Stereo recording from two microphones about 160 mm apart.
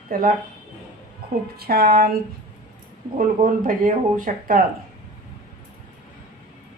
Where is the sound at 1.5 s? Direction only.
75° right (ahead or behind).